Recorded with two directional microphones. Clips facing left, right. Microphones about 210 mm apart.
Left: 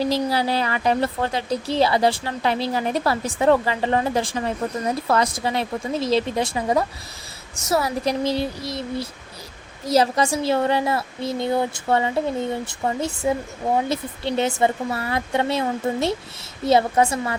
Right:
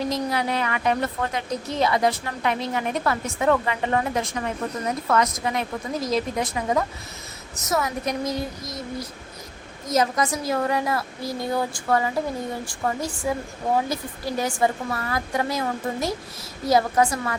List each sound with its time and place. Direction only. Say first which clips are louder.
0.0 s a woman's voice: left 3 dB; 30° left (ahead or behind)